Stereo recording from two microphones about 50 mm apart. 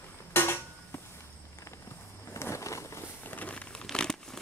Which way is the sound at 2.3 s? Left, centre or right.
Left.